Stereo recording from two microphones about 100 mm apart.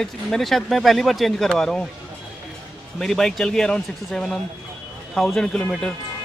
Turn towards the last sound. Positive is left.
turn(degrees=10)  # may be behind; listen again after turning